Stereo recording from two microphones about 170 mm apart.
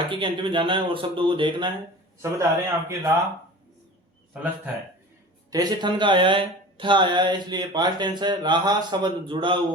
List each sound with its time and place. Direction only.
0.0 s speech: 30° right (ahead or behind)
2.2 s a man's voice: 15° right (ahead or behind)
5.5 s speech: 20° right (ahead or behind)